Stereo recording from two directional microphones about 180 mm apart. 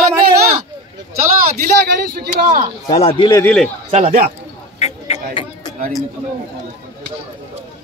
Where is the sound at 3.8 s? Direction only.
30° right (ahead or behind).